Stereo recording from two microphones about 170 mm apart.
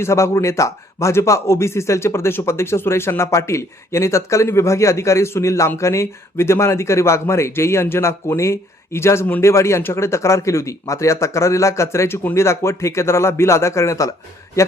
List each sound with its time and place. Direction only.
0.0 s a man's voice: 15° left (ahead or behind)